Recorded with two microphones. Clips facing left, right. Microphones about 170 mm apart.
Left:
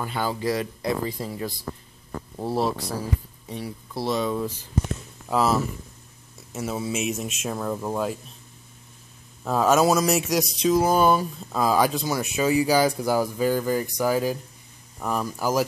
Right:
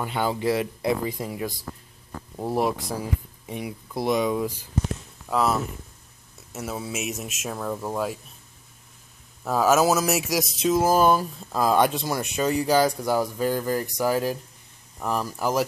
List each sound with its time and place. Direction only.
0.0 s speech: 20° right (ahead or behind)
2.5 s speech: 15° right (ahead or behind)
5.3 s speech: centre (ahead or behind)
9.4 s speech: 5° right (ahead or behind)